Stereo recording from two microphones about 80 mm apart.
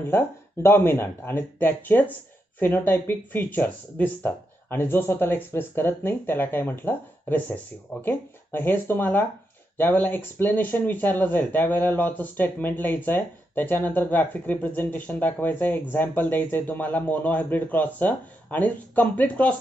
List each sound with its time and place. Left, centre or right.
0.1 s speech: left